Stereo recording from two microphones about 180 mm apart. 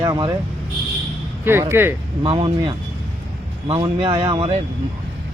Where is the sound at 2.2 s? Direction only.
30° right (ahead or behind).